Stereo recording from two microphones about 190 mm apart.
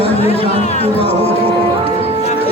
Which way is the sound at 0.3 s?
35° left (ahead or behind).